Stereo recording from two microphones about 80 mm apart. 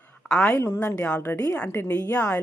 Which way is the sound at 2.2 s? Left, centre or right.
Centre.